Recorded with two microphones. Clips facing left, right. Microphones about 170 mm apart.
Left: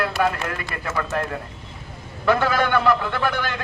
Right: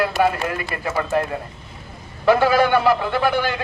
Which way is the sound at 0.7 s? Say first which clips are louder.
Right 4 dB; 20° right (ahead or behind).